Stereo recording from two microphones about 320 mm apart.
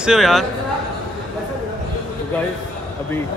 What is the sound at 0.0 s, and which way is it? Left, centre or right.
Speech, centre.